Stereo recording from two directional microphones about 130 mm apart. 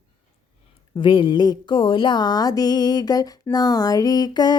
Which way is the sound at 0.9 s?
40° left (ahead or behind).